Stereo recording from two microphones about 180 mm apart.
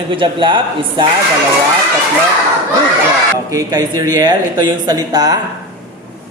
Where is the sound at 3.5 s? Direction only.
20° right (ahead or behind).